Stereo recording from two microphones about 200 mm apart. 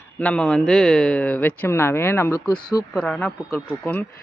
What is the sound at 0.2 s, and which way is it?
Speech, 5° left (ahead or behind).